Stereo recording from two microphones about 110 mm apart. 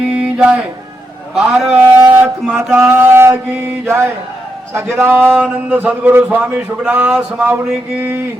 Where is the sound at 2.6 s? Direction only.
20° right (ahead or behind).